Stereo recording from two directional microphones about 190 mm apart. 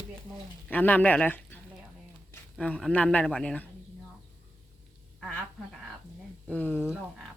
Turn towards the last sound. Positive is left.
turn(degrees=10)  # may be behind; listen again after turning